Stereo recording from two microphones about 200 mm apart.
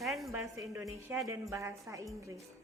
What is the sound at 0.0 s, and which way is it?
Music, centre (ahead or behind).